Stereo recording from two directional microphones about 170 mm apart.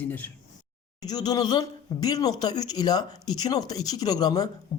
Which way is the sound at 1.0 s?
25° left (ahead or behind).